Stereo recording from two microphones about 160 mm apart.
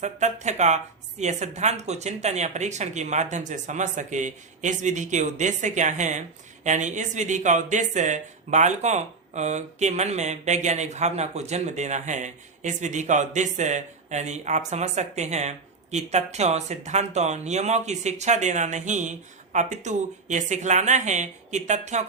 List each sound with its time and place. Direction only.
0.0 s speech: 45° right (ahead or behind)